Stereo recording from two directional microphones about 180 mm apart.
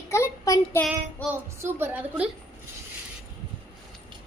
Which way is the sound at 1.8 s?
10° right (ahead or behind).